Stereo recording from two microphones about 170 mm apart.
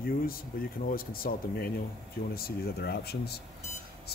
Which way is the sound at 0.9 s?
60° left (ahead or behind).